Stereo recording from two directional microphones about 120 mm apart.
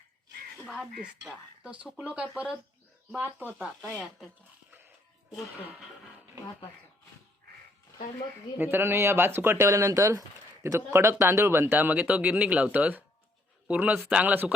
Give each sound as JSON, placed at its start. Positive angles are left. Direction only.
{"t": 0.7, "sound": "speech", "side_deg": 0}
{"t": 3.9, "sound": "speech", "side_deg": 5}
{"t": 8.5, "sound": "speech", "side_deg": -20}